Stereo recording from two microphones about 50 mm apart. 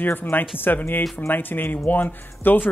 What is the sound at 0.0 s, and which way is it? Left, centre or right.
Speech, left.